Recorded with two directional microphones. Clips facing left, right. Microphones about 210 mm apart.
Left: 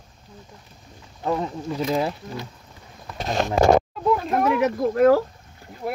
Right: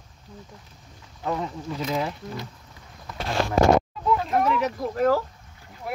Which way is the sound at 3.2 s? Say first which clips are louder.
Left 2 dB; 20° left (ahead or behind).